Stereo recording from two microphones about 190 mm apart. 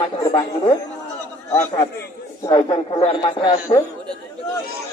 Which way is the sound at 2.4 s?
25° left (ahead or behind).